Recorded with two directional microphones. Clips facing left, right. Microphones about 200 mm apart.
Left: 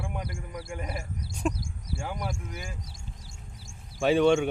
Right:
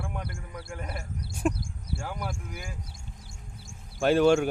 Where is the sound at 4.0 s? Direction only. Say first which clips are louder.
Right 1 dB; centre (ahead or behind).